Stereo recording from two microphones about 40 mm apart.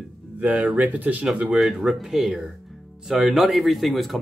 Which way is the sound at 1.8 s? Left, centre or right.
Centre.